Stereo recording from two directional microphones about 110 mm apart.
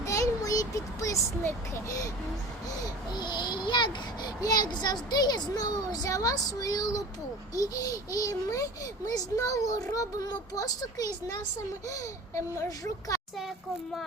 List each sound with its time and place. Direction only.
0.0 s speech: 30° left (ahead or behind)
2.8 s a child's voice: 40° left (ahead or behind)